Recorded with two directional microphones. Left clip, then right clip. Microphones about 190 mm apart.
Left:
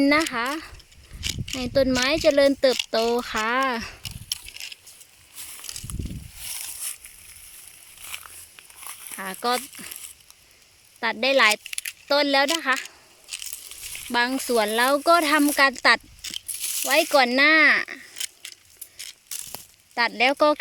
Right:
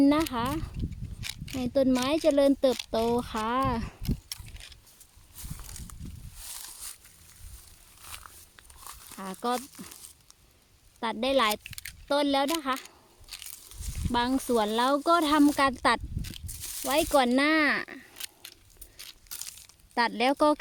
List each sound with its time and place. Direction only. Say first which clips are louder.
0.0 s speech: left 4 dB; 5° right (ahead or behind)
1.2 s mechanisms: left 9 dB; 30° right (ahead or behind)
1.5 s speech: left 4 dB; 10° right (ahead or behind)
4.0 s a sound: left 6 dB; 20° right (ahead or behind)
6.5 s a sound: left 7 dB; 10° left (ahead or behind)
8.0 s crumpling: left 7 dB; centre (ahead or behind)
11.0 s speech: left 7 dB; 10° right (ahead or behind)
14.1 s speech: left 4 dB; 10° right (ahead or behind)
19.0 s tearing: left 6 dB; 50° right (ahead or behind)
19.9 s speech: left 5 dB; 20° right (ahead or behind)